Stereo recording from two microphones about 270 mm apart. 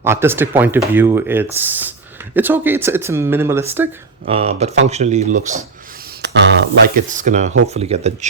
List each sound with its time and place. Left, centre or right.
0.0 s speech: centre
4.3 s speech: right
6.2 s a sound: right
6.8 s speech: right